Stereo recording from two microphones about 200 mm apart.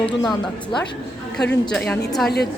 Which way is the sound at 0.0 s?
20° left (ahead or behind).